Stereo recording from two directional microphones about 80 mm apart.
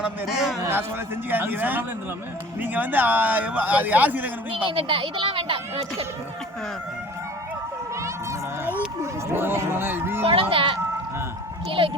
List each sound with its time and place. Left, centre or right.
0.0 s a man's voice: centre
0.7 s a man's voice: right
4.5 s a woman's voice: right
9.0 s a man's voice: right
10.5 s a woman's voice: right